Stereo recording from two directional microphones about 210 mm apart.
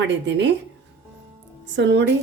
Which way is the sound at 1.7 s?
60° right (ahead or behind).